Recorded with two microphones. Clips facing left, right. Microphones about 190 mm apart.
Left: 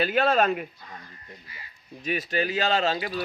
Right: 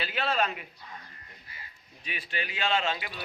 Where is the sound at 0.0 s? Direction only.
45° left (ahead or behind).